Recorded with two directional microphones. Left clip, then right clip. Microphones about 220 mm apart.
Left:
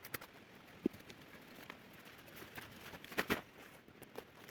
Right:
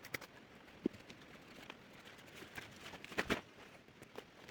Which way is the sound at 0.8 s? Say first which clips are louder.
Left 1 dB; 10° left (ahead or behind).